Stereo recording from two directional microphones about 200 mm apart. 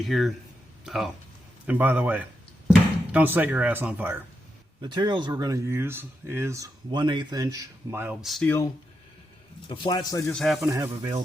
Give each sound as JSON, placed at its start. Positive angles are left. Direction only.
{"t": 0.0, "sound": "speech", "side_deg": 0}
{"t": 4.8, "sound": "speech", "side_deg": -20}
{"t": 9.6, "sound": "speech", "side_deg": 25}
{"t": 10.3, "sound": "speech", "side_deg": 0}
{"t": 10.7, "sound": "speech", "side_deg": -15}